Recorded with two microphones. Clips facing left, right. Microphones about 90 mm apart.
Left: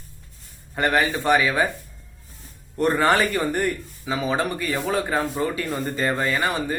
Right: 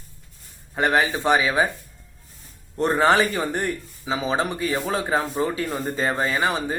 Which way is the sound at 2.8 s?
20° right (ahead or behind).